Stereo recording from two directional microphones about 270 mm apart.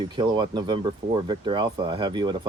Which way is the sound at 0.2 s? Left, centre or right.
Centre.